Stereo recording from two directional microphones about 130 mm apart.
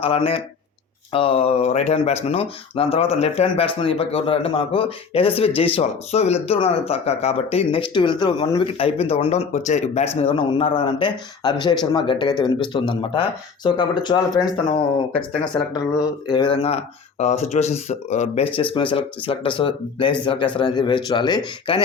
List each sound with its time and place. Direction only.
0.0 s speech: 45° left (ahead or behind)
16.3 s speech: 35° left (ahead or behind)
16.6 s speech: 50° left (ahead or behind)
18.5 s speech: 45° left (ahead or behind)